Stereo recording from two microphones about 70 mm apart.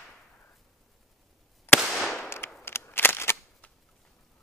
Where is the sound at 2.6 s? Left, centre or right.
Left.